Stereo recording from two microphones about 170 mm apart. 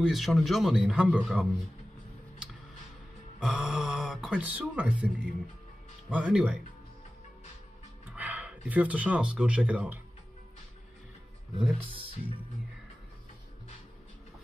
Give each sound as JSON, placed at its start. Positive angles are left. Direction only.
{"t": 0.0, "sound": "a man's voice", "side_deg": 0}
{"t": 3.3, "sound": "a man's voice", "side_deg": 0}
{"t": 8.1, "sound": "speech", "side_deg": -10}